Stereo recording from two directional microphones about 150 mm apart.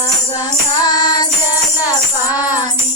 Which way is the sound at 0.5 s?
25° left (ahead or behind).